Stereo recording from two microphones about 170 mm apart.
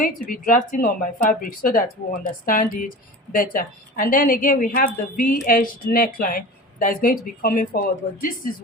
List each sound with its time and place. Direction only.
0.0 s speech: 55° left (ahead or behind)